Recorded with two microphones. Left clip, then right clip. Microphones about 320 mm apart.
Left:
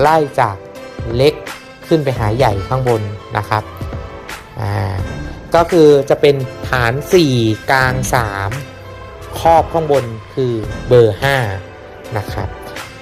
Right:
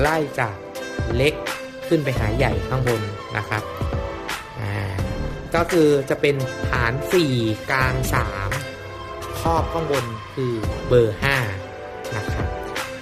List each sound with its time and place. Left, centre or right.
0.0 s speech: centre
4.3 s music: centre
5.5 s speech: centre